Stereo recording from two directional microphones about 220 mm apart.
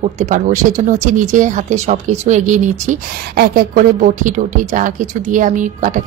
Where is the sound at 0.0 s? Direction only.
35° right (ahead or behind).